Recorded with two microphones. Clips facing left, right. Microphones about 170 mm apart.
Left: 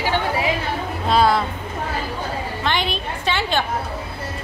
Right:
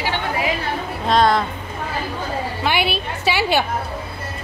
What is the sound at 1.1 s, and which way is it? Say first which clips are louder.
Speech: right 1 dB; 5° left (ahead or behind).